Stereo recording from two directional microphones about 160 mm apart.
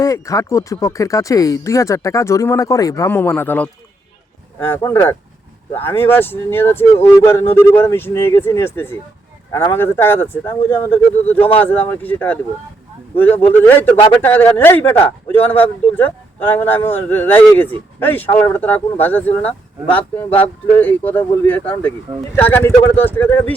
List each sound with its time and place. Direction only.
0.0 s speech: 20° left (ahead or behind)